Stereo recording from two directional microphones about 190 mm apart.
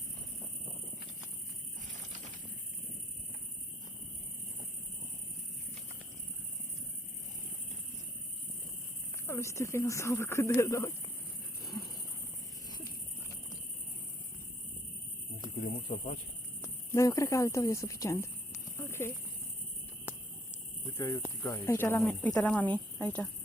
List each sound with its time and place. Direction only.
9.2 s speech: 15° left (ahead or behind)
15.9 s speech: 40° left (ahead or behind)
16.9 s speech: 15° left (ahead or behind)
18.8 s a sound: 15° left (ahead or behind)
20.9 s speech: 20° left (ahead or behind)